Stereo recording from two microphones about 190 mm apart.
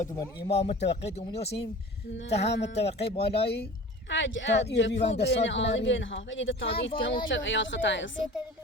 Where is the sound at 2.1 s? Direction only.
60° left (ahead or behind).